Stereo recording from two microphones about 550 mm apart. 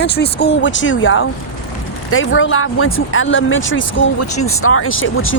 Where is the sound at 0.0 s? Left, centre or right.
Centre.